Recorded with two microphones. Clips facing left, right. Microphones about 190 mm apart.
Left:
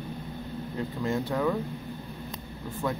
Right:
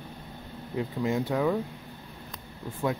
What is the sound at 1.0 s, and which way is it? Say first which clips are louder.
Speech: right 1 dB; 15° right (ahead or behind).